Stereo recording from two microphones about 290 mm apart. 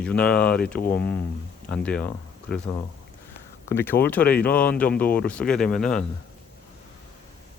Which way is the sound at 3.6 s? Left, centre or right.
Centre.